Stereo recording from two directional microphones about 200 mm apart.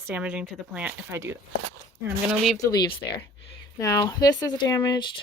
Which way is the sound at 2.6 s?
15° left (ahead or behind).